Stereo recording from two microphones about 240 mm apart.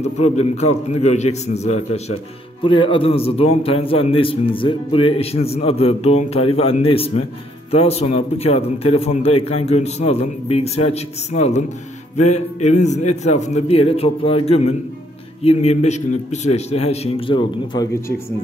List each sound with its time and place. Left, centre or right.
0.0 s a man's voice: left